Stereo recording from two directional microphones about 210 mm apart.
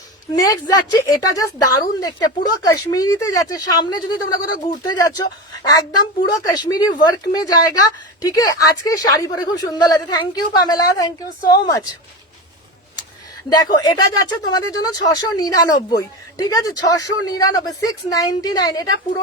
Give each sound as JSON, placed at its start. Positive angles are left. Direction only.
{"t": 0.3, "sound": "a woman's voice", "side_deg": 15}
{"t": 13.5, "sound": "a woman's voice", "side_deg": 20}